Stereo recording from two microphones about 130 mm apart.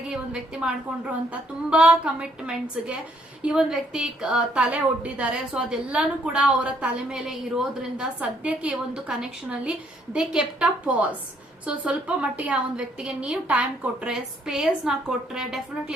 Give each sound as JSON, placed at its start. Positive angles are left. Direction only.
{"t": 0.1, "sound": "a woman's voice", "side_deg": -5}